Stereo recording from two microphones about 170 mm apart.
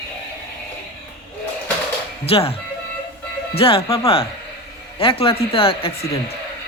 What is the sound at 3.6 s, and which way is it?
Speech, 35° left (ahead or behind).